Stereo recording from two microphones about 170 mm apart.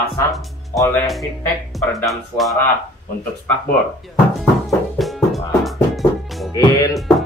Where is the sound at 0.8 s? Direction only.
10° left (ahead or behind).